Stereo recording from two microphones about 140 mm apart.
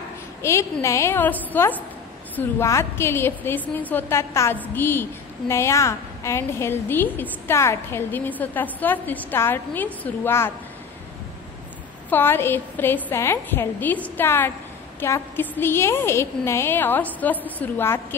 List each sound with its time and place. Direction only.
0.4 s a woman's voice: 20° left (ahead or behind)
12.1 s a woman's voice: 15° left (ahead or behind)